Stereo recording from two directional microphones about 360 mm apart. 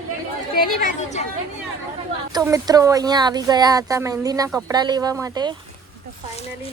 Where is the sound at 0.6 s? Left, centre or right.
Left.